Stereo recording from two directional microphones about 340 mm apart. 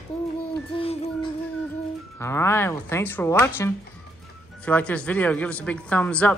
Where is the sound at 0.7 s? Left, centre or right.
Centre.